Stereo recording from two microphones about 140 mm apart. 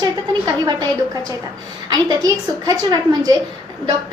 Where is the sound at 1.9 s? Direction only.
30° right (ahead or behind).